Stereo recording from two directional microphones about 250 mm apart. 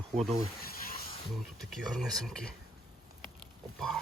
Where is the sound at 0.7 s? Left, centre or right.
Left.